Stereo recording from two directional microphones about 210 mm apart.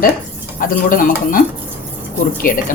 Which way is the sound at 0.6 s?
40° left (ahead or behind).